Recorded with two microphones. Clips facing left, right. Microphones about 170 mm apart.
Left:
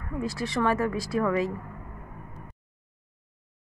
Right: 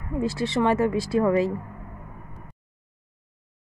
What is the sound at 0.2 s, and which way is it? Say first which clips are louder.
Speech: right 4 dB; 25° right (ahead or behind).